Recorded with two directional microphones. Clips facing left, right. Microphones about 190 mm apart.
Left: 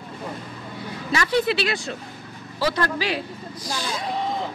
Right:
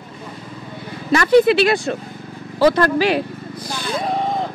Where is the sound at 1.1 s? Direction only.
55° right (ahead or behind).